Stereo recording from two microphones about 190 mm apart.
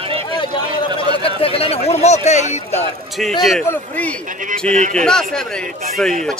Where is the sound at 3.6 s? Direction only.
10° left (ahead or behind).